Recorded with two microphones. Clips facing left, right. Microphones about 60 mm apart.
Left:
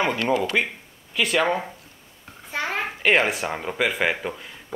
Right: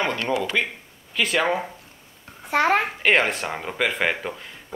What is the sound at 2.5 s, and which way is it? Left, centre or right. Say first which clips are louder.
Speech: right 8 dB; right.